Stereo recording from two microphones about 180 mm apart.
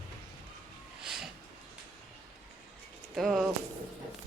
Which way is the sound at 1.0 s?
5° right (ahead or behind).